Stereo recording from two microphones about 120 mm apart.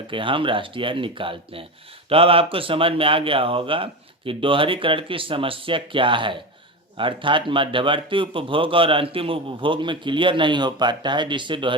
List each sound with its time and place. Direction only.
0.1 s speech: 45° right (ahead or behind)